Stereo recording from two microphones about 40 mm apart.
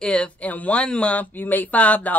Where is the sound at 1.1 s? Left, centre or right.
Left.